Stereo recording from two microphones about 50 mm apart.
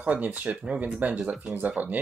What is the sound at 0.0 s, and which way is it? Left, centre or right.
Speech, right.